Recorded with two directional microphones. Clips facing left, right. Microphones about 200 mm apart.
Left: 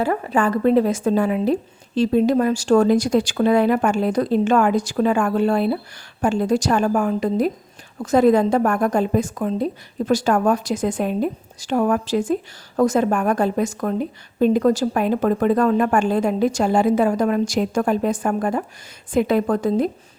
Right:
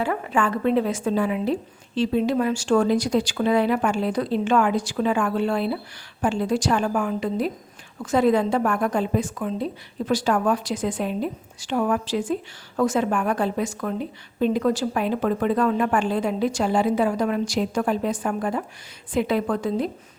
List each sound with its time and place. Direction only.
0.0 s a woman's voice: 40° left (ahead or behind)